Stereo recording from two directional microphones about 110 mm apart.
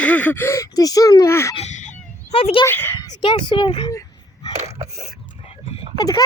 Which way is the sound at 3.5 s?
45° left (ahead or behind).